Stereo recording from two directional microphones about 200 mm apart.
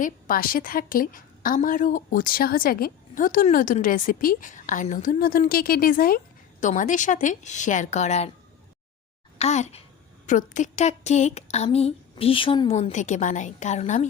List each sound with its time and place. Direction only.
0.0 s a woman's voice: 45° left (ahead or behind)
9.4 s a woman's voice: 35° left (ahead or behind)